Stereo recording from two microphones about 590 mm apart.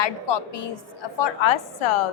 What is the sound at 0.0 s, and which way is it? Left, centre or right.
A woman's voice, left.